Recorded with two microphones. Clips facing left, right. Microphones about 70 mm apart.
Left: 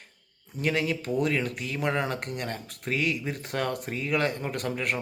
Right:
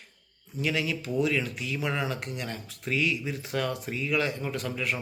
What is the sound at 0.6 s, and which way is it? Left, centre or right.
Speech, left.